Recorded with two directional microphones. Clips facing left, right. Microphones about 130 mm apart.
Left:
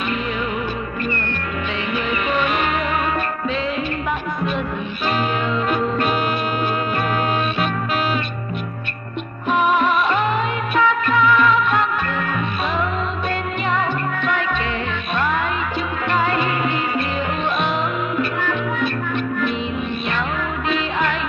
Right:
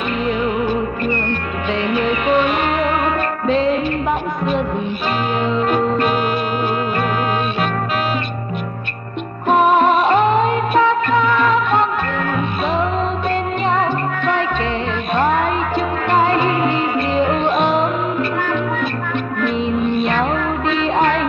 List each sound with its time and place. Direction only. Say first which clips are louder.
3.4 s music: right 10 dB; 40° right (ahead or behind)
9.5 s music of bollywood: right 5 dB; 40° right (ahead or behind)
15.1 s music: right 5 dB; 40° right (ahead or behind)
20.8 s music: right 6 dB; 35° right (ahead or behind)